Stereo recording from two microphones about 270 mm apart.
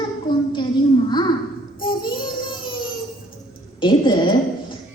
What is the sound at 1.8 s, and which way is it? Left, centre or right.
Child singing, centre.